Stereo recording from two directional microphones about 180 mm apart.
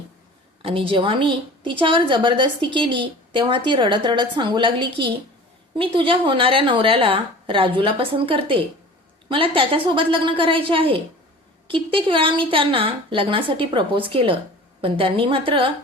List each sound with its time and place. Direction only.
0.6 s a woman's voice: 30° right (ahead or behind)